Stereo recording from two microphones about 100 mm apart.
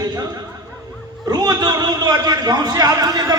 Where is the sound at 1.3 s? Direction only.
40° right (ahead or behind).